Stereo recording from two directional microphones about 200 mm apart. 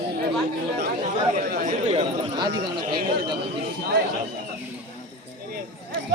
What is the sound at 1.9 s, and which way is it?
Chatter, 30° right (ahead or behind).